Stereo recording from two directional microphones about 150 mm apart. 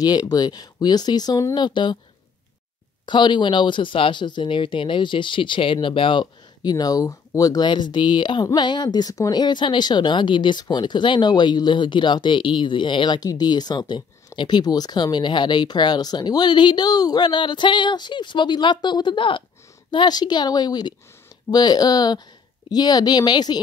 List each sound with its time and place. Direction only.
0.0 s speech: 25° left (ahead or behind)
3.1 s speech: 30° left (ahead or behind)